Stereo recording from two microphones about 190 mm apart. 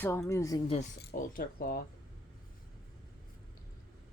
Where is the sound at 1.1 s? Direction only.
50° left (ahead or behind).